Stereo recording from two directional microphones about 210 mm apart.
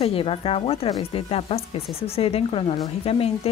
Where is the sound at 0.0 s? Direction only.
25° left (ahead or behind).